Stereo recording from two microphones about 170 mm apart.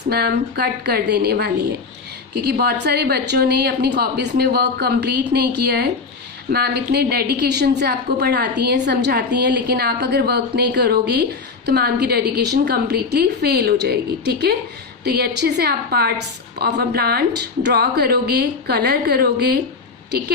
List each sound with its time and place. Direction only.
0.1 s a woman's voice: 70° right (ahead or behind)